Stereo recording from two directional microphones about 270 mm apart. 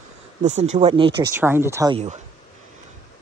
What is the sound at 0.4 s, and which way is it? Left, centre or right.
Speech, right.